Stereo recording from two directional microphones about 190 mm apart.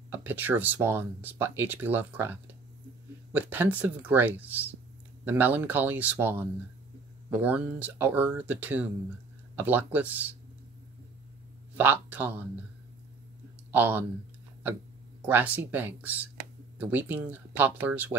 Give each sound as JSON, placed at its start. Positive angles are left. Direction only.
{"t": 0.1, "sound": "speech", "side_deg": -10}
{"t": 11.7, "sound": "speech", "side_deg": -10}
{"t": 13.7, "sound": "speech", "side_deg": -10}
{"t": 15.2, "sound": "speech", "side_deg": -10}